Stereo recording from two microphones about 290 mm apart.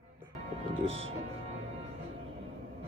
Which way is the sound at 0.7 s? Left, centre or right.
Centre.